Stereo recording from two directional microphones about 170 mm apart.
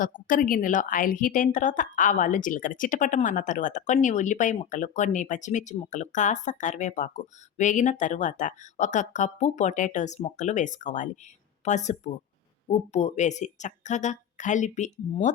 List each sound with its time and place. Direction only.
0.0 s a woman's voice: 50° left (ahead or behind)